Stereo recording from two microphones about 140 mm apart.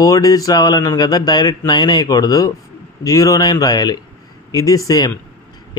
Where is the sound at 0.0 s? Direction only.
25° left (ahead or behind).